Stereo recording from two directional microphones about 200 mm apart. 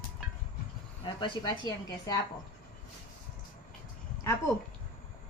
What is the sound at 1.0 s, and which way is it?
A woman's voice, 25° left (ahead or behind).